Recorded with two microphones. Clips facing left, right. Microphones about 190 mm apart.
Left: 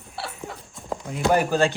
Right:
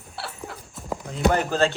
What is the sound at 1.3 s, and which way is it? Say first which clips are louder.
Speech: left 2 dB; 15° left (ahead or behind).